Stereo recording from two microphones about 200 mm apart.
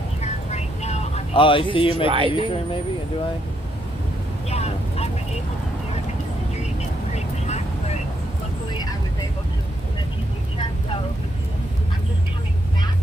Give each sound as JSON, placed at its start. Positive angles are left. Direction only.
{"t": 0.2, "sound": "music", "side_deg": 35}
{"t": 2.0, "sound": "speech", "side_deg": -25}
{"t": 2.3, "sound": "speech", "side_deg": 25}
{"t": 4.5, "sound": "vehicle", "side_deg": 30}
{"t": 7.4, "sound": "vehicle", "side_deg": 35}